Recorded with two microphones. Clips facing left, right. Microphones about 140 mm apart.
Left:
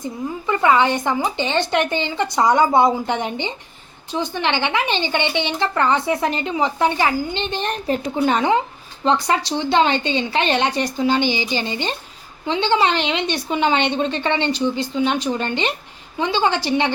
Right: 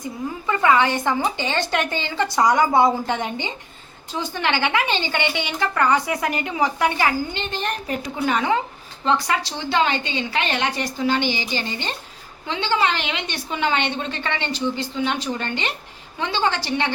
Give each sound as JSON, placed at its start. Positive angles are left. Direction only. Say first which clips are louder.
{"t": 0.4, "sound": "a woman's voice", "louder": "left 2 dB", "side_deg": 20}